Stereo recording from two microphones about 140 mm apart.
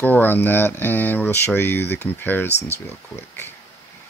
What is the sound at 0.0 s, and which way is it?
Speech, 15° left (ahead or behind).